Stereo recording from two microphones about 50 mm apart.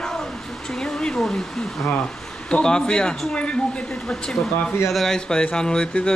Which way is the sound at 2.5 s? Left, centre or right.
Centre.